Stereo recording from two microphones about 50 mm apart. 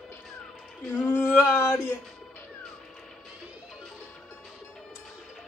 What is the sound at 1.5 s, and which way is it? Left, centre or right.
Music, left.